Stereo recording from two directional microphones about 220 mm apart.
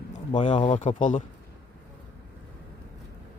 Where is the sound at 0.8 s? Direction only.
35° left (ahead or behind).